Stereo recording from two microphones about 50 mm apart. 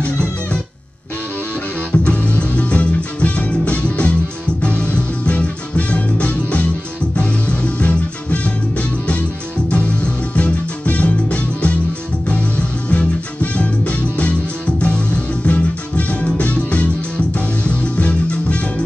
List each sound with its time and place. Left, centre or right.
1.9 s music: left
10.3 s music: left